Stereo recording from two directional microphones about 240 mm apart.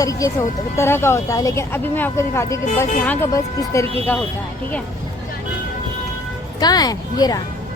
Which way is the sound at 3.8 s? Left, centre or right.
Right.